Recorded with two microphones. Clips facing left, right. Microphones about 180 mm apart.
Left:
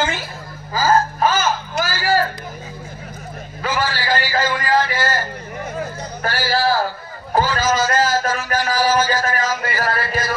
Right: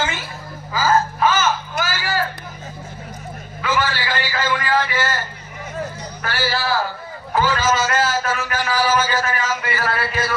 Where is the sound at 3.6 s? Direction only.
40° left (ahead or behind).